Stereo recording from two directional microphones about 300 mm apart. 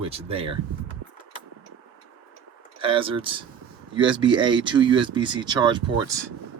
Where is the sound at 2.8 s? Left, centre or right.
Centre.